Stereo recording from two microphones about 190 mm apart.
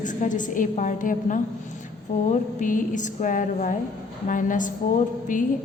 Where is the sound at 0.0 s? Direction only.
40° left (ahead or behind).